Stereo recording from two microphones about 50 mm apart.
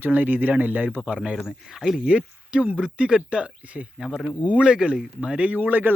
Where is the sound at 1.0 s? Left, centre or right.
Right.